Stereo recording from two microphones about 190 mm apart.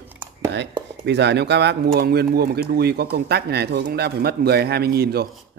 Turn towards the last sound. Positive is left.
turn(degrees=-55)  # may be behind; listen again after turning